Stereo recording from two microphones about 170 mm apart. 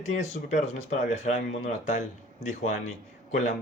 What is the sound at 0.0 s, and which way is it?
Speech, 45° left (ahead or behind).